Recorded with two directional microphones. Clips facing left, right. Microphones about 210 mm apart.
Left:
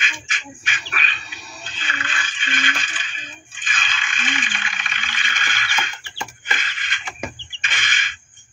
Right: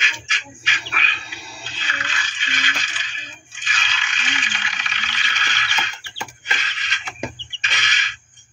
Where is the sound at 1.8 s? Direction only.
50° left (ahead or behind).